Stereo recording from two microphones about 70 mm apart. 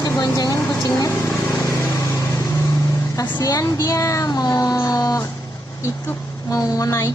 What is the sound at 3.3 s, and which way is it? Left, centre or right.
Speech, left.